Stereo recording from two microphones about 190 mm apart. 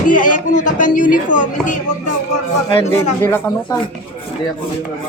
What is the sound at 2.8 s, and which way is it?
Speech, 10° left (ahead or behind).